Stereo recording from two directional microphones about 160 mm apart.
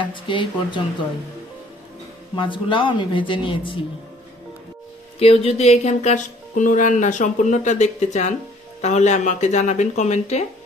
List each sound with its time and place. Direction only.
0.0 s speech: 30° left (ahead or behind)
2.3 s speech: 30° left (ahead or behind)
5.2 s music: 40° left (ahead or behind)